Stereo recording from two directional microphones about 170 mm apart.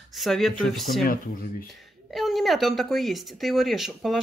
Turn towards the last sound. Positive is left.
turn(degrees=0)  # may be behind; listen again after turning